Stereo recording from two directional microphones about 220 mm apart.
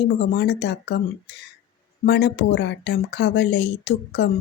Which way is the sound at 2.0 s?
50° left (ahead or behind).